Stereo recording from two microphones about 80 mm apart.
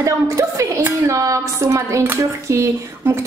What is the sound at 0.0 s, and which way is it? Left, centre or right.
A woman's voice, right.